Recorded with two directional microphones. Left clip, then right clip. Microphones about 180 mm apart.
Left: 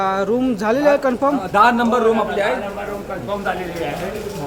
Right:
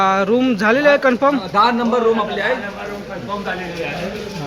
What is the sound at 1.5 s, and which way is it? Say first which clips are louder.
Speech: left 1 dB; 45° left (ahead or behind).